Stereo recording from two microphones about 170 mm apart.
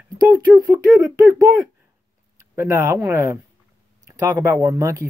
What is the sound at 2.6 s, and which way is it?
Speech, 15° right (ahead or behind).